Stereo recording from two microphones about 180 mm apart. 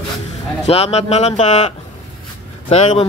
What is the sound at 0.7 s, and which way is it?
Speech, 35° left (ahead or behind).